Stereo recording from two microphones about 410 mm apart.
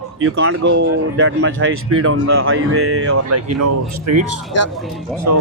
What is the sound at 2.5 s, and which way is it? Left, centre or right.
Speech, right.